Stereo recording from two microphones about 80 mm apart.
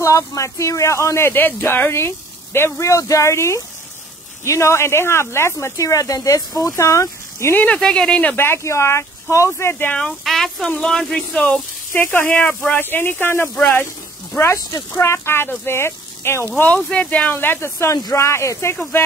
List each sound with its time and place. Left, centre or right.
0.0 s speech: left
7.6 s speech: centre
8.4 s speech: left
9.9 s speech: centre
11.9 s speech: left
14.5 s speech: left
15.0 s speech: left